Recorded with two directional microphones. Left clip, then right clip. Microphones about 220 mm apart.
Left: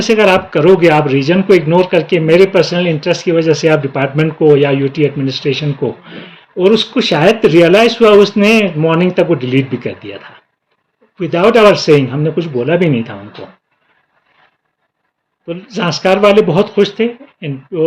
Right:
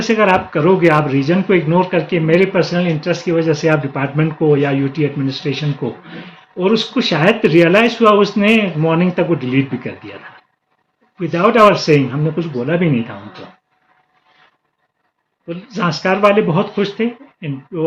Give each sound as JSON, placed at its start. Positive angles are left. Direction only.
{"t": 0.0, "sound": "speech", "side_deg": 50}
{"t": 11.2, "sound": "speech", "side_deg": 50}
{"t": 15.4, "sound": "speech", "side_deg": 50}